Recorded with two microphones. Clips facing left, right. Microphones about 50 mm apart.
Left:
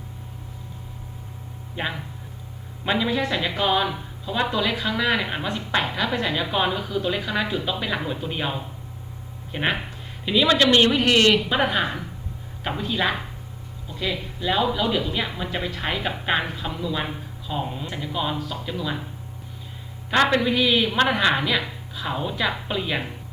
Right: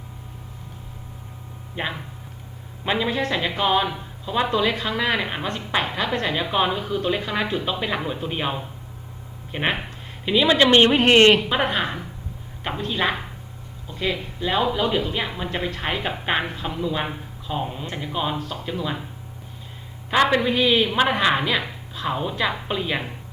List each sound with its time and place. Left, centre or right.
1.8 s a woman's voice: centre
6.7 s a woman's voice: right
6.9 s a woman's voice: centre
11.4 s a woman's voice: centre
20.5 s a woman's voice: centre